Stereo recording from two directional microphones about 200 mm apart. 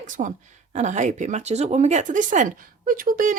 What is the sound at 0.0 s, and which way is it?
Speech, 40° right (ahead or behind).